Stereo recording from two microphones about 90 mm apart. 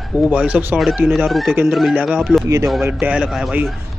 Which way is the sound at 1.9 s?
10° right (ahead or behind).